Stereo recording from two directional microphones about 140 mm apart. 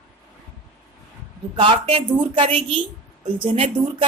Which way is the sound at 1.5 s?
40° right (ahead or behind).